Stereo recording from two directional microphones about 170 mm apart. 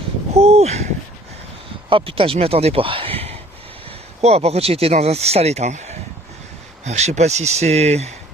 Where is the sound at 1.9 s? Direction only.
30° right (ahead or behind).